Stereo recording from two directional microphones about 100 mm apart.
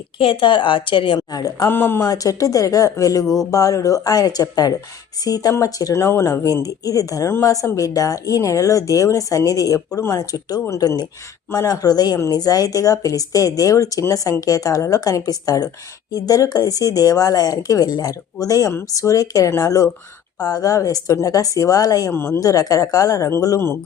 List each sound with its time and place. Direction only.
0.2 s a woman's voice: 60° left (ahead or behind)
1.3 s speech: 40° left (ahead or behind)
1.7 s speech: 20° left (ahead or behind)
2.0 s speech: 35° left (ahead or behind)
22.1 s speech: 20° left (ahead or behind)
22.4 s speech: 35° left (ahead or behind)